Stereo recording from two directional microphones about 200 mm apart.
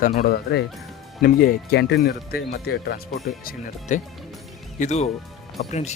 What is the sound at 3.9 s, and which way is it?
Speech, 35° left (ahead or behind).